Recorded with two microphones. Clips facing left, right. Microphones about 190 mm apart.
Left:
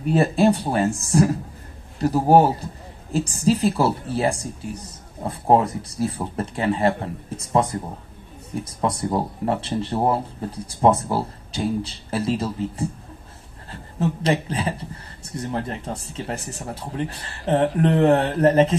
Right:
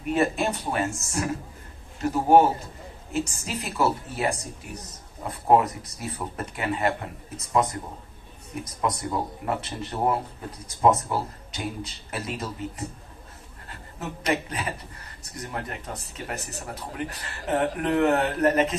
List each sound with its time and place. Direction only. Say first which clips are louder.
0.0 s a man's voice: left 6 dB; 30° left (ahead or behind)
8.8 s a man's voice: left 4 dB; 30° left (ahead or behind)